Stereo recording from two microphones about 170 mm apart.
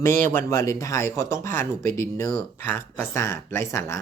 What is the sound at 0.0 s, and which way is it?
Speech, 15° left (ahead or behind).